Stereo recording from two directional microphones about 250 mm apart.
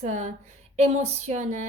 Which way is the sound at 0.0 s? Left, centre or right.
Right.